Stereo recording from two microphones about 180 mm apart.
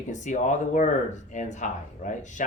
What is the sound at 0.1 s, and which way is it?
Speech, 40° left (ahead or behind).